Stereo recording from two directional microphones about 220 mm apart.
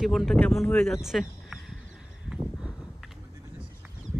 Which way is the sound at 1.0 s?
Centre (ahead or behind).